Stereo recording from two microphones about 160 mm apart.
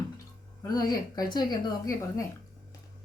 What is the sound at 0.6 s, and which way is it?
A woman's voice, 25° left (ahead or behind).